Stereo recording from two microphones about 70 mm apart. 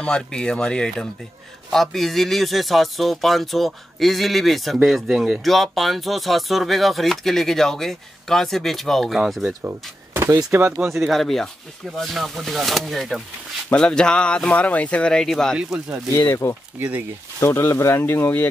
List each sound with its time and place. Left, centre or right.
0.0 s speech: centre
5.4 s speech: centre
9.6 s speech: right
11.0 s speech: centre
13.7 s speech: centre
16.4 s speech: left